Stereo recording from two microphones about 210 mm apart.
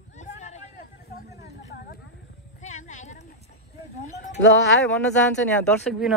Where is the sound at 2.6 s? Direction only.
35° left (ahead or behind).